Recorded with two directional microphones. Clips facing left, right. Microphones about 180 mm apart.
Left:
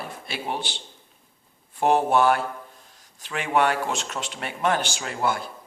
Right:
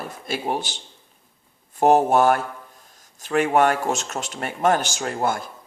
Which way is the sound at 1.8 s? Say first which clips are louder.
Right 3 dB; 45° right (ahead or behind).